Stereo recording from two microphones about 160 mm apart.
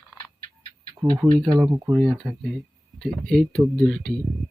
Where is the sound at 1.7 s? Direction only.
20° right (ahead or behind).